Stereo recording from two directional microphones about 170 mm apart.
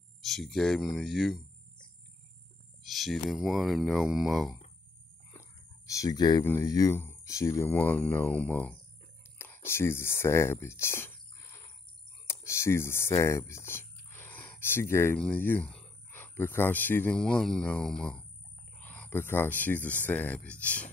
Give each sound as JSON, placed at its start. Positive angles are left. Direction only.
{"t": 0.2, "sound": "speech", "side_deg": 0}
{"t": 2.8, "sound": "speech", "side_deg": 0}
{"t": 5.4, "sound": "a sound", "side_deg": 20}
{"t": 6.4, "sound": "speech", "side_deg": 15}